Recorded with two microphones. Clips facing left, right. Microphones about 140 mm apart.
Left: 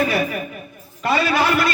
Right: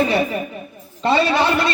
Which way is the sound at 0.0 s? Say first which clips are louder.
Right 2 dB; 25° right (ahead or behind).